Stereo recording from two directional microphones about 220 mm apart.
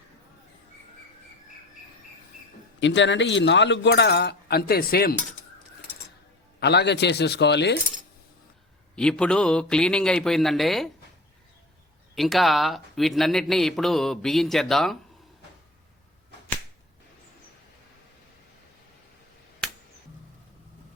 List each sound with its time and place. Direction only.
2.8 s speech: 55° left (ahead or behind)
6.6 s speech: 50° left (ahead or behind)
9.0 s a man's voice: 5° left (ahead or behind)
12.1 s a man's voice: centre (ahead or behind)